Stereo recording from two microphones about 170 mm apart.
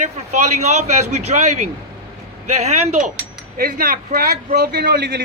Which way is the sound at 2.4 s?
40° right (ahead or behind).